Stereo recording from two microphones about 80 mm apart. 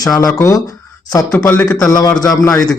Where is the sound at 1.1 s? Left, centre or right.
Left.